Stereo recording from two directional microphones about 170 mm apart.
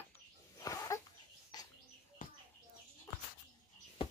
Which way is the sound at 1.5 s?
25° left (ahead or behind).